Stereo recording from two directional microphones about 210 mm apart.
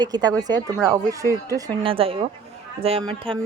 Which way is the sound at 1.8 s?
25° right (ahead or behind).